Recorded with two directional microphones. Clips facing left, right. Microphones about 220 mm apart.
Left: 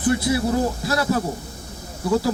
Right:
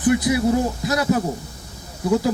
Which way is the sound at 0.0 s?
15° right (ahead or behind).